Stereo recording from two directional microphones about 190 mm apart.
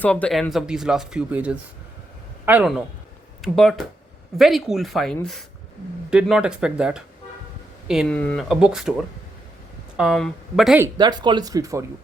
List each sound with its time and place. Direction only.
0.0 s speech: 5° left (ahead or behind)
10.9 s speech: 25° right (ahead or behind)